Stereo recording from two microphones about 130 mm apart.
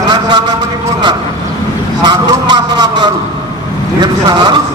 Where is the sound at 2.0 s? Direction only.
30° right (ahead or behind).